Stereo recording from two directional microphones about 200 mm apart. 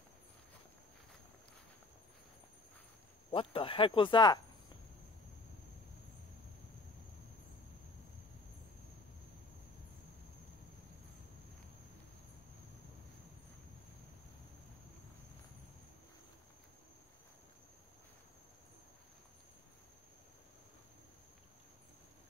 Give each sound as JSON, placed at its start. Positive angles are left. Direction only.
{"t": 3.3, "sound": "speech", "side_deg": 25}